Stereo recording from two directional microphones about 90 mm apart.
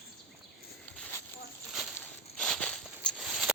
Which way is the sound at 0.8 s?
15° left (ahead or behind).